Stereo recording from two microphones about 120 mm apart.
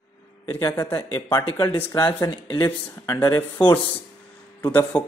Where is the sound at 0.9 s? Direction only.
35° left (ahead or behind).